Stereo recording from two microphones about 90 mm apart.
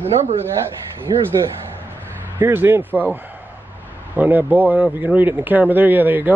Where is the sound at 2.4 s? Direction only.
25° right (ahead or behind).